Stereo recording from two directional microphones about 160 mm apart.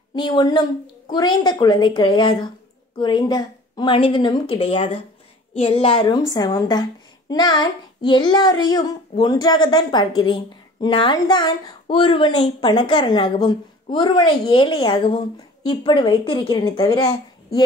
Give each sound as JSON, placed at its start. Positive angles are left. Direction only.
{"t": 0.1, "sound": "a woman's voice", "side_deg": 30}